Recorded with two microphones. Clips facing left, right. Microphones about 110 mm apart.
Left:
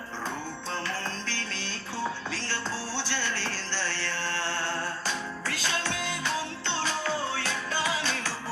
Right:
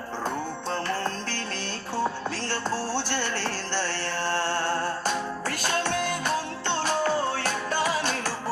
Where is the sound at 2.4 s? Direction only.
50° right (ahead or behind).